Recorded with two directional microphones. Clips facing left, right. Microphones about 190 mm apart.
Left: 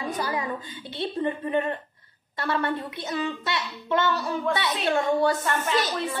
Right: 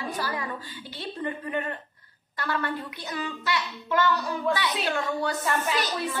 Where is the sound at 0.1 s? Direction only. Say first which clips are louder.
Left 3 dB; 20° left (ahead or behind).